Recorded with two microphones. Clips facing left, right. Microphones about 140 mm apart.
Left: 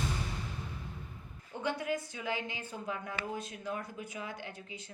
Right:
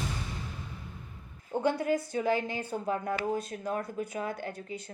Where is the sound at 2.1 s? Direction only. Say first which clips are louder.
Right 9 dB; 45° right (ahead or behind).